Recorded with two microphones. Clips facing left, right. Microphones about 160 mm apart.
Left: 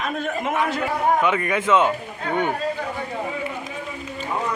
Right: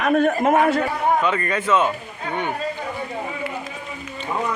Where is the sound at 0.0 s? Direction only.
55° right (ahead or behind).